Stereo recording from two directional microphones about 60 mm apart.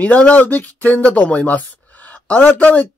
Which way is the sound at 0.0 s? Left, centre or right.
Left.